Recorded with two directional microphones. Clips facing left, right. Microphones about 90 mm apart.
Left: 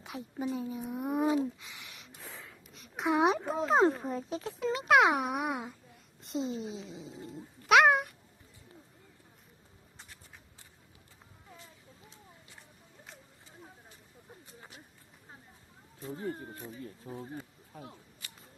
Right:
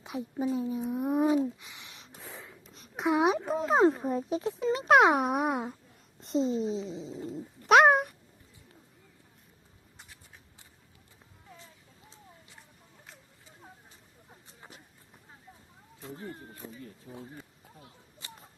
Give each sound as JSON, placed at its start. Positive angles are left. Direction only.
{"t": 0.0, "sound": "speech", "side_deg": -20}
{"t": 1.5, "sound": "a sound", "side_deg": -20}
{"t": 2.6, "sound": "a sound", "side_deg": -35}
{"t": 2.9, "sound": "speech", "side_deg": -20}
{"t": 3.4, "sound": "speech", "side_deg": 0}
{"t": 4.3, "sound": "speech", "side_deg": -25}
{"t": 4.9, "sound": "speech", "side_deg": -35}
{"t": 17.1, "sound": "speech", "side_deg": 40}
{"t": 18.2, "sound": "whip", "side_deg": -25}